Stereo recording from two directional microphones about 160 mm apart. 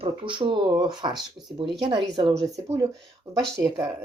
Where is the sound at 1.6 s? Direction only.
30° right (ahead or behind).